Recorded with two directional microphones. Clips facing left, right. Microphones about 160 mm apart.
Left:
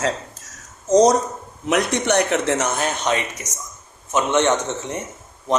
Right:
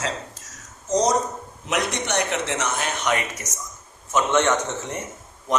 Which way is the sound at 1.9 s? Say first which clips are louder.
Left 6 dB; 50° left (ahead or behind).